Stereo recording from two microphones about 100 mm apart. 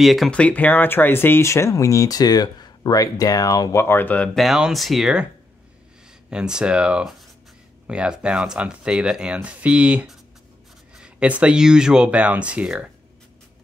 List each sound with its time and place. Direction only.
0.0 s speech: centre (ahead or behind)
0.3 s speech: 15° left (ahead or behind); by 3.7 s 40° left (ahead or behind)
3.7 s speech: 25° left (ahead or behind)
4.4 s speech: 5° right (ahead or behind)
6.3 s speech: 10° right (ahead or behind)